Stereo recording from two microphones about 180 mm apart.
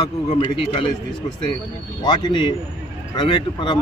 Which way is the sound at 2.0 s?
25° left (ahead or behind).